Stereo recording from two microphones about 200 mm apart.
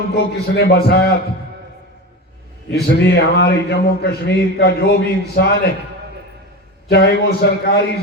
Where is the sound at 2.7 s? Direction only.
55° left (ahead or behind).